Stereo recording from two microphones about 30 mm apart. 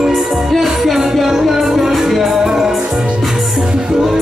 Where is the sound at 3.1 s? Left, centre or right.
Centre.